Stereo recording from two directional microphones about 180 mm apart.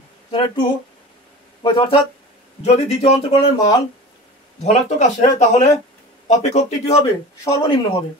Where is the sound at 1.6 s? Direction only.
25° left (ahead or behind).